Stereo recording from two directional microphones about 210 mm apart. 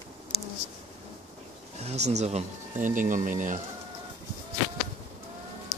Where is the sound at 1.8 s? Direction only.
30° right (ahead or behind).